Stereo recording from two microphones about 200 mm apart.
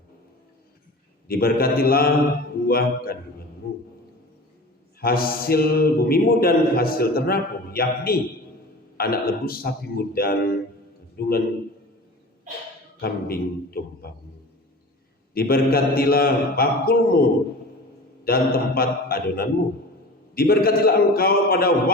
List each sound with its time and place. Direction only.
1.3 s a man's voice: 50° left (ahead or behind)
4.9 s a man's voice: 50° left (ahead or behind)
13.0 s a man's voice: 50° left (ahead or behind)
15.4 s a man's voice: 50° left (ahead or behind)
18.3 s a man's voice: 50° left (ahead or behind)